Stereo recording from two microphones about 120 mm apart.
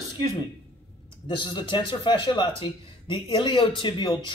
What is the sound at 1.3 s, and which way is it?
A man's voice, 40° left (ahead or behind).